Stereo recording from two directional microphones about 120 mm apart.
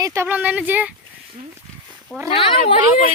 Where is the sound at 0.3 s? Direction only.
15° right (ahead or behind).